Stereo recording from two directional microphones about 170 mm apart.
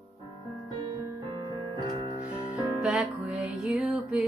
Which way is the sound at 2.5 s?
5° right (ahead or behind).